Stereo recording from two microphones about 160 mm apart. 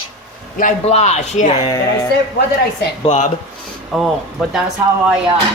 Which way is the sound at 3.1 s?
45° left (ahead or behind).